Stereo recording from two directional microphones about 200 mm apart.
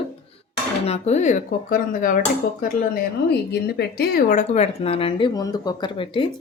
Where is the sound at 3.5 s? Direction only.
55° left (ahead or behind); by 5.3 s 30° left (ahead or behind).